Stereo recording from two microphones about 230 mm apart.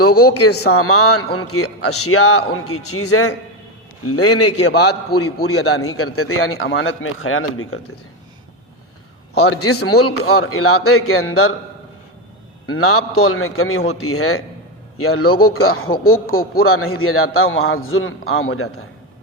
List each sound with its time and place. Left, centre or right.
0.0 s a man's voice: left
4.0 s a man's voice: left
4.7 s speech: left
5.1 s a man's voice: left
9.3 s a man's voice: left
10.1 s speech: left
10.4 s a man's voice: left
12.6 s a man's voice: left